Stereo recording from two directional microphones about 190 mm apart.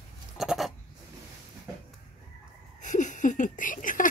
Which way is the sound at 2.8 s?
40° left (ahead or behind).